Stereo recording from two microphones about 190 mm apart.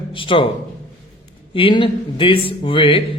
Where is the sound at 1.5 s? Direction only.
25° left (ahead or behind).